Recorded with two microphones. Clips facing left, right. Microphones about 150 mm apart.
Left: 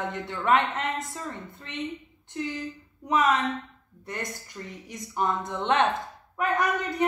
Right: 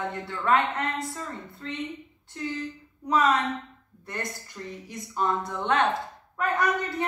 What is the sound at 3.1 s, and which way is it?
Speech, 15° left (ahead or behind).